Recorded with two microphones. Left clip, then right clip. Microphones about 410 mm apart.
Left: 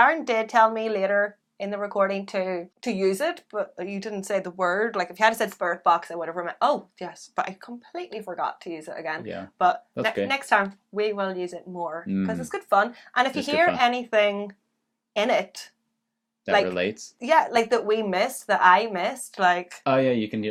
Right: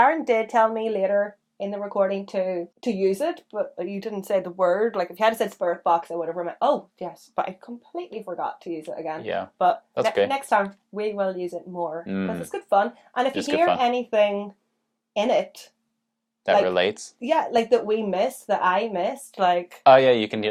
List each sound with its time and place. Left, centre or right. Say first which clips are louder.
0.0 s a woman's voice: right 1 dB; left
10.2 s a woman's voice: even; centre
16.6 s speech: right 5 dB; right
17.2 s a woman's voice: left 2 dB; left
19.8 s speech: right 10 dB; right